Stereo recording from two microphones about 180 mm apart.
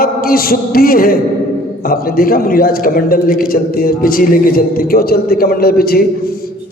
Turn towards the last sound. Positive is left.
turn(degrees=55)  # may be behind; listen again after turning